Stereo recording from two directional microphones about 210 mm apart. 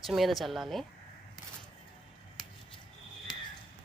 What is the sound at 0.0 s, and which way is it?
Speech, centre (ahead or behind).